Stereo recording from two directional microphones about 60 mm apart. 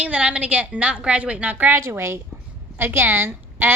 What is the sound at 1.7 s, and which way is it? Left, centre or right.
A woman's voice, right.